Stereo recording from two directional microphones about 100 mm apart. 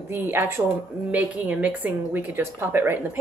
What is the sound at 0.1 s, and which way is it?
A woman's voice, 25° right (ahead or behind).